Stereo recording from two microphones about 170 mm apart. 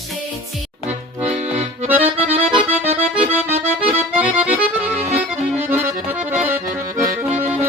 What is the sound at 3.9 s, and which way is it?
Accordion, 10° right (ahead or behind).